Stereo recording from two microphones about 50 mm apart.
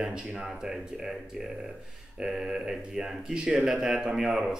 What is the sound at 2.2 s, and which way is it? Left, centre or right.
Speech, centre.